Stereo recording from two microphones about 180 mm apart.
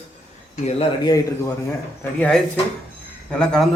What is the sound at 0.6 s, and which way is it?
Speech, 35° left (ahead or behind).